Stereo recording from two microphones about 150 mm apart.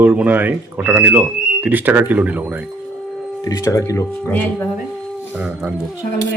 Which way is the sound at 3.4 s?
25° left (ahead or behind).